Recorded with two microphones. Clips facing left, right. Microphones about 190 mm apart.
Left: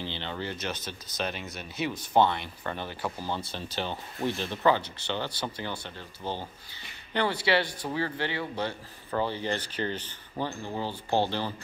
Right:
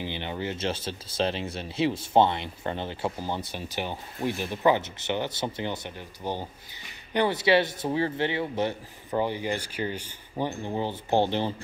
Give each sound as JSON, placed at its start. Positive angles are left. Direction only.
{"t": 0.0, "sound": "speech", "side_deg": -15}